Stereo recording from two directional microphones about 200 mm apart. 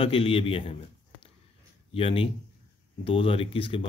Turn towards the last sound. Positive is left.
turn(degrees=25)  # may be behind; listen again after turning